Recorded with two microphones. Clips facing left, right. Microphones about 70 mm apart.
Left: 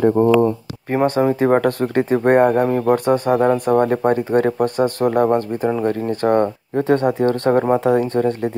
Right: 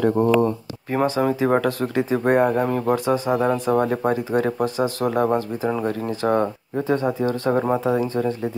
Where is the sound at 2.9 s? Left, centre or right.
Left.